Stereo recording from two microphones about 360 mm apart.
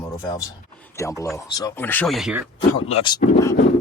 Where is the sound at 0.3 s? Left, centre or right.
Centre.